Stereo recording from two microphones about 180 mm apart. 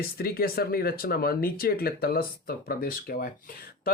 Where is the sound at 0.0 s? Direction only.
55° left (ahead or behind).